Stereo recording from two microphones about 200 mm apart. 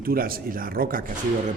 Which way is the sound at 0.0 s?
50° right (ahead or behind).